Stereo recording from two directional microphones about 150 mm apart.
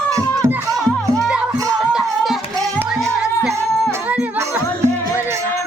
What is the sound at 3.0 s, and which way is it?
Music, centre (ahead or behind).